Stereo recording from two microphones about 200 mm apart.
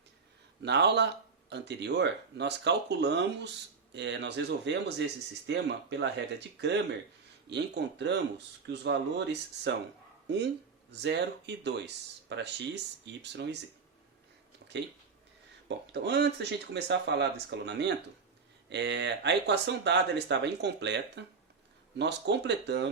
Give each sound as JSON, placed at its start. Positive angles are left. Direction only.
{"t": 0.6, "sound": "speech", "side_deg": -60}
{"t": 15.9, "sound": "speech", "side_deg": -55}